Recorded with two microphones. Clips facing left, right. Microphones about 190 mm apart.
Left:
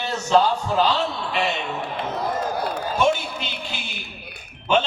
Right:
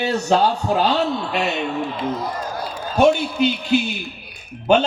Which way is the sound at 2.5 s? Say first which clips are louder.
Left 3 dB; 60° left (ahead or behind).